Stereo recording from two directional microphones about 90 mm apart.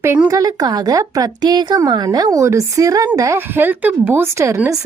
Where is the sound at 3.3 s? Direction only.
20° right (ahead or behind).